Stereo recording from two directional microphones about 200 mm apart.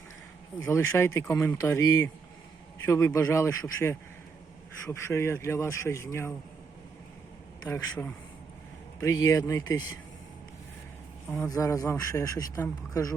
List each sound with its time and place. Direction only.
0.6 s speech: 15° left (ahead or behind)
7.6 s speech: 10° left (ahead or behind)
11.3 s speech: 15° left (ahead or behind)